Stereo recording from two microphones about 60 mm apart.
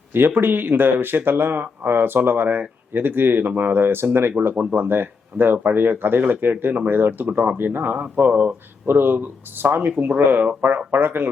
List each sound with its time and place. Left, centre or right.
0.1 s speech: right